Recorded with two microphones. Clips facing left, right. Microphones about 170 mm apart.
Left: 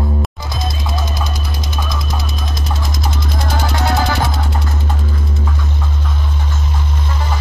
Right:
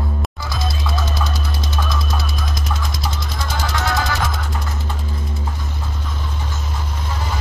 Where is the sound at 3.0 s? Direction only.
55° left (ahead or behind).